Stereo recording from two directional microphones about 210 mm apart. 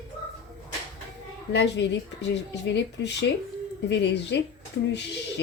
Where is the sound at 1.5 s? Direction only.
55° left (ahead or behind).